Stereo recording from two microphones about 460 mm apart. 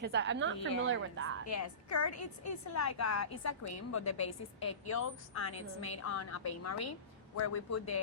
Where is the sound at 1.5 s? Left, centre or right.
Left.